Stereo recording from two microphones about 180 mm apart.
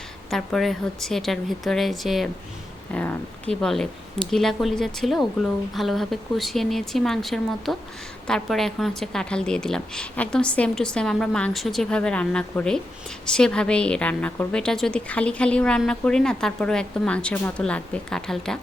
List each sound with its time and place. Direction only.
0.3 s a woman's voice: centre (ahead or behind)